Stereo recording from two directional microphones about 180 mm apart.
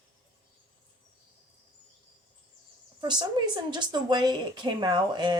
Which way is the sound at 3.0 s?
25° right (ahead or behind).